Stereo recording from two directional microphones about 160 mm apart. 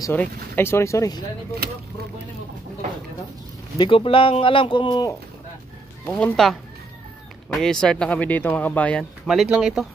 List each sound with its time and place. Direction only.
0.0 s speech: 10° left (ahead or behind)
3.7 s speech: 30° left (ahead or behind)
6.0 s speech: 5° left (ahead or behind)